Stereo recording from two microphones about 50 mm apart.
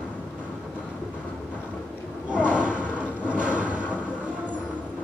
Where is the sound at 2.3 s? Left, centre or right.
Right.